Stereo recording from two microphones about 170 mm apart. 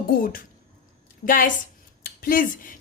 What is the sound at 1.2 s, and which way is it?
A woman's voice, 55° left (ahead or behind).